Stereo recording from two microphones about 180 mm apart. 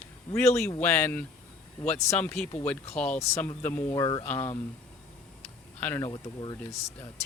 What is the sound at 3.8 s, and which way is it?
Speech, 20° left (ahead or behind).